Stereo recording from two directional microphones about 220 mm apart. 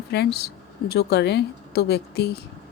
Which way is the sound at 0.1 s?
50° left (ahead or behind).